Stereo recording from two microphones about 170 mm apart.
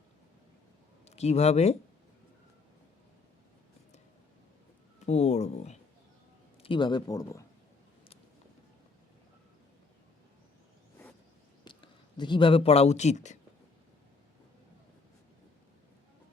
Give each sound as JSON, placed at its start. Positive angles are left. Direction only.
{"t": 1.0, "sound": "speech", "side_deg": 40}
{"t": 5.0, "sound": "speech", "side_deg": 40}
{"t": 6.6, "sound": "speech", "side_deg": 30}
{"t": 11.6, "sound": "speech", "side_deg": 25}